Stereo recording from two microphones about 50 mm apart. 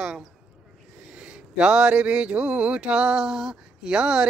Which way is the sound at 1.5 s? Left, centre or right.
Centre.